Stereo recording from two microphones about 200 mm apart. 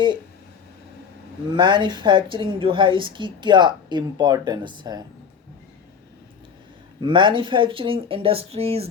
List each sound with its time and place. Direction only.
1.5 s a woman's voice: 20° right (ahead or behind)
7.0 s a woman's voice: 25° right (ahead or behind)